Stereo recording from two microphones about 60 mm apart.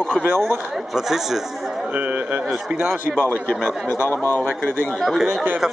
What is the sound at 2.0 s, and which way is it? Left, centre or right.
Speech, right.